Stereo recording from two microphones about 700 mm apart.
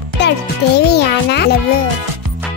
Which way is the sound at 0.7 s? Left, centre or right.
Centre.